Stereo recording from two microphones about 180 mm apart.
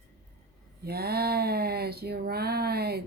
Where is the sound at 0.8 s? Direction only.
60° right (ahead or behind).